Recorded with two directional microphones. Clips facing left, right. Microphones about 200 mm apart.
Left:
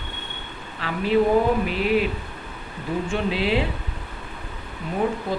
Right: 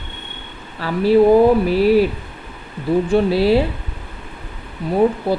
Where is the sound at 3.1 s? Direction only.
35° right (ahead or behind).